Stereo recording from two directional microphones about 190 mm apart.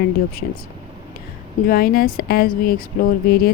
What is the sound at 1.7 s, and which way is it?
Speech, 50° left (ahead or behind).